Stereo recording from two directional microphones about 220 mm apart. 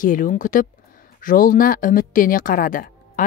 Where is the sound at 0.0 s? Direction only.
35° left (ahead or behind).